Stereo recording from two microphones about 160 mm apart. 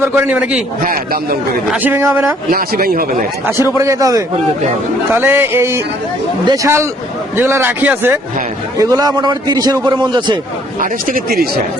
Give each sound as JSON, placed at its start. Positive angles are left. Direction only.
{"t": 0.0, "sound": "a man's voice", "side_deg": -10}
{"t": 0.8, "sound": "speech", "side_deg": -60}
{"t": 1.7, "sound": "a man's voice", "side_deg": -10}
{"t": 2.5, "sound": "speech", "side_deg": -65}
{"t": 3.8, "sound": "a man's voice", "side_deg": -20}
{"t": 8.8, "sound": "a man's voice", "side_deg": -20}
{"t": 10.8, "sound": "speech", "side_deg": -65}